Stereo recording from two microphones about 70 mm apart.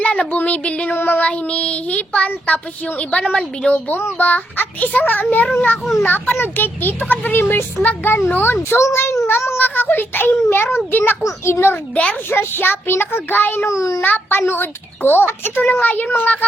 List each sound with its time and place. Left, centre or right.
0.0 s a sound: centre
0.9 s a child's voice: left
1.3 s a child's voice: centre; by 9.6 s left
9.6 s a child's voice: left
11.2 s a child's voice: left
13.7 s a child's voice: left
14.0 s a child's voice: left